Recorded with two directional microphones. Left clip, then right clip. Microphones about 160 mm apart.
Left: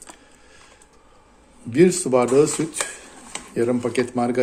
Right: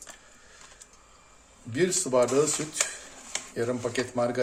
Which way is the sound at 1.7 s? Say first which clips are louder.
Left 8 dB; 45° left (ahead or behind).